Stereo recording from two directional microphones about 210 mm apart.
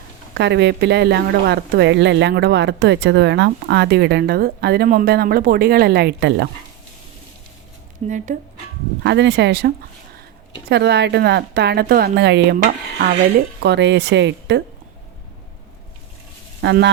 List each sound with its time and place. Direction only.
0.3 s speech: 55° right (ahead or behind)
8.1 s speech: 35° right (ahead or behind)
9.0 s speech: 55° right (ahead or behind)
13.6 s speech: 55° right (ahead or behind)
16.6 s speech: 55° right (ahead or behind)